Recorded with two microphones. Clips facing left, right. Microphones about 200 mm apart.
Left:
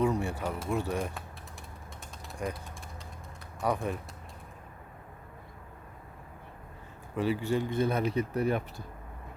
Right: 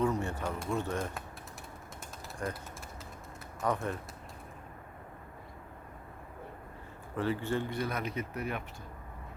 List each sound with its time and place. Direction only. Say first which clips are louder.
0.0 s speech: left 2 dB; 10° left (ahead or behind)
2.4 s speech: left 2 dB; 10° left (ahead or behind)
3.6 s speech: left 2 dB; 10° left (ahead or behind)
7.2 s speech: left 3 dB; 10° left (ahead or behind)
7.7 s speech: left 7 dB; 25° left (ahead or behind)